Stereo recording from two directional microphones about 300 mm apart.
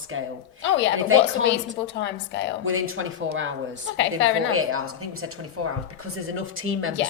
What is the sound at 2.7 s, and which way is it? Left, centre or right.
A man's voice, right.